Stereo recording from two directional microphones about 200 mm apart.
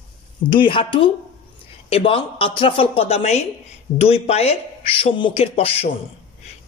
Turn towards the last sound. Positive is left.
turn(degrees=30)  # may be behind; listen again after turning